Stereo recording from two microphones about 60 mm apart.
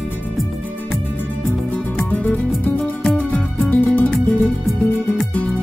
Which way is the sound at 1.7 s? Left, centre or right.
Left.